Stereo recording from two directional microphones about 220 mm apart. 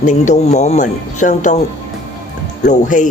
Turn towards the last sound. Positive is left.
turn(degrees=35)  # may be behind; listen again after turning